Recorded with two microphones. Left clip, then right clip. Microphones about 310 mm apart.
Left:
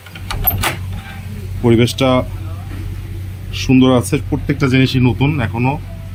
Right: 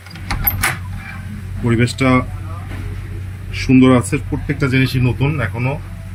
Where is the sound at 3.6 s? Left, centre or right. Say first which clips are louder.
Even; centre.